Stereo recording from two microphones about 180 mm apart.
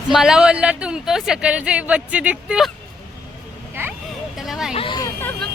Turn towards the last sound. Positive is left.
turn(degrees=30)  # may be behind; listen again after turning